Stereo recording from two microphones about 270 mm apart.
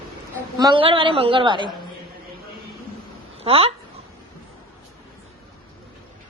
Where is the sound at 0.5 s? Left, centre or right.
Centre.